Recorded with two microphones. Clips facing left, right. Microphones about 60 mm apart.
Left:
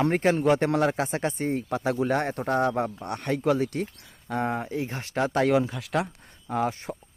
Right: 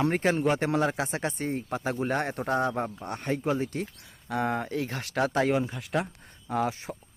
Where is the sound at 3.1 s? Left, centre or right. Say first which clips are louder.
Left 2 dB; left.